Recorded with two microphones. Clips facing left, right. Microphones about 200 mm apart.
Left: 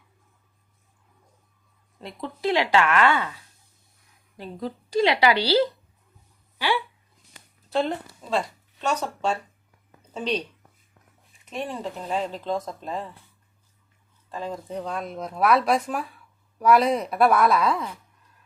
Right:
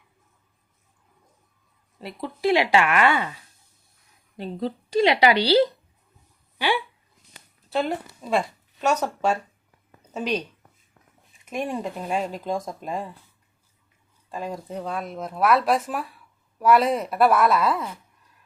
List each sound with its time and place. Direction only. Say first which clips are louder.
2.0 s speech: right 2 dB; 5° right (ahead or behind)
4.4 s speech: right 4 dB; 25° right (ahead or behind); by 10.4 s 10° right (ahead or behind)
11.4 s speech: right 3 dB; 10° right (ahead or behind)
14.3 s speech: even; 10° right (ahead or behind)